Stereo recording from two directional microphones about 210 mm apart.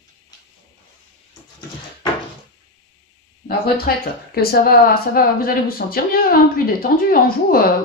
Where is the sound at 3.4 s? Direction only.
45° left (ahead or behind).